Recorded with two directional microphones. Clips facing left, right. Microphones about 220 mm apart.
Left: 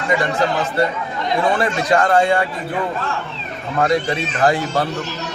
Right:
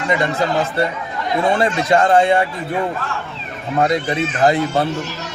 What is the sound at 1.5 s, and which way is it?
Speech, 25° right (ahead or behind).